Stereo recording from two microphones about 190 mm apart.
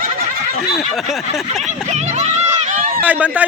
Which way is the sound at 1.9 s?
35° right (ahead or behind).